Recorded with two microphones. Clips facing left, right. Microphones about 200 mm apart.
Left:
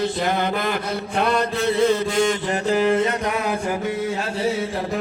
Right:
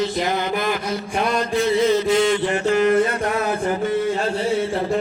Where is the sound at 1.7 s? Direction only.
55° left (ahead or behind).